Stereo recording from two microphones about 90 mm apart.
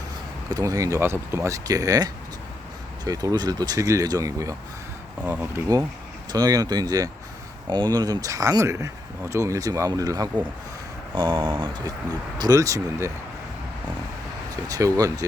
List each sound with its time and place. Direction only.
0.5 s speech: 40° right (ahead or behind)
5.2 s speech: 20° right (ahead or behind)
6.3 s speech: 45° right (ahead or behind)
11.1 s speech: 60° right (ahead or behind); by 13.1 s 35° right (ahead or behind)
14.5 s speech: 40° right (ahead or behind)